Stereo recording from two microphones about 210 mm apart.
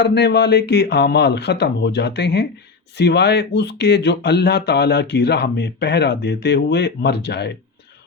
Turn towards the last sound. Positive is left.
turn(degrees=55)  # may be behind; listen again after turning